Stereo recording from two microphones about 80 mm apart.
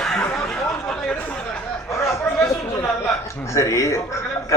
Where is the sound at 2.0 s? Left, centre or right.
Left.